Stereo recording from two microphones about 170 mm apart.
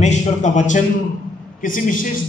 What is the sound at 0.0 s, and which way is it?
A man's voice, 45° left (ahead or behind).